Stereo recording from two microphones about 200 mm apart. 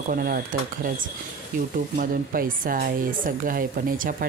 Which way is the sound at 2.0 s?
45° right (ahead or behind).